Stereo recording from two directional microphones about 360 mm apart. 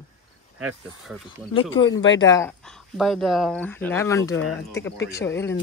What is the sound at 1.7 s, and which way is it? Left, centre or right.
Speech, left.